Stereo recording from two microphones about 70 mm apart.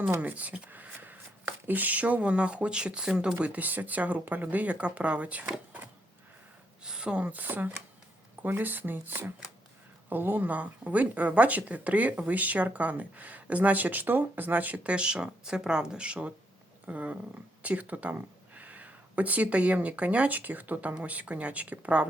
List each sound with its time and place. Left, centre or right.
0.2 s a sound: right
1.6 s speech: right
6.8 s speech: centre